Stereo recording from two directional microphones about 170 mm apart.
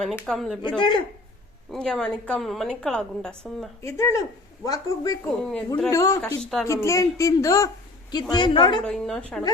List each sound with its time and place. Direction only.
0.0 s a woman's voice: centre (ahead or behind)
0.8 s speech: 25° left (ahead or behind)
1.7 s a woman's voice: 5° left (ahead or behind)
3.8 s speech: 15° left (ahead or behind)
5.5 s a woman's voice: 5° left (ahead or behind)
5.9 s speech: 15° left (ahead or behind)
6.2 s a woman's voice: 5° left (ahead or behind)
6.8 s speech: 20° left (ahead or behind)
8.8 s a woman's voice: 5° left (ahead or behind)